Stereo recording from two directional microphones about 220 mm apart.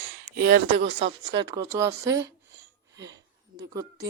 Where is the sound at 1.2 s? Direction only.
15° right (ahead or behind).